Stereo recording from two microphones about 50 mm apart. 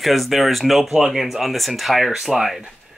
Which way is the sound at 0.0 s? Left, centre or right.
Centre.